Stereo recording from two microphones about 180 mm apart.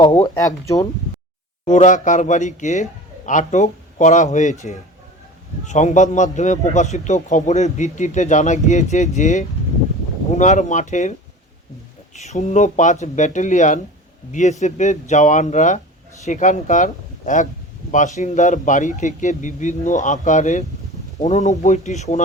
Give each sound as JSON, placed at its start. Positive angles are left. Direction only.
{"t": 0.0, "sound": "speech", "side_deg": 20}
{"t": 1.6, "sound": "a man's voice", "side_deg": 45}
{"t": 12.1, "sound": "a man's voice", "side_deg": 40}